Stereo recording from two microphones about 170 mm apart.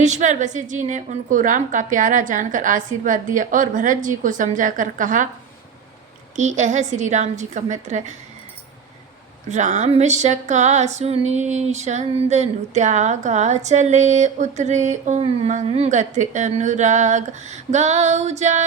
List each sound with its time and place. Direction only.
0.0 s a woman's voice: 45° right (ahead or behind)
6.3 s a woman's voice: 45° right (ahead or behind)
9.5 s a woman's voice: 45° right (ahead or behind)